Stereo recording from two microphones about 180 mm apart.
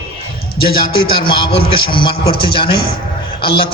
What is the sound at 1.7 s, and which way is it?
Speech, 30° left (ahead or behind).